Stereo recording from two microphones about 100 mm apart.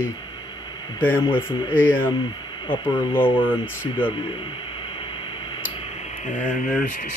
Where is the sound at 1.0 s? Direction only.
20° left (ahead or behind).